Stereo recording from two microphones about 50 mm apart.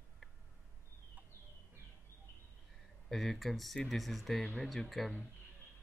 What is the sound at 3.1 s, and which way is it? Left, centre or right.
Speech, centre.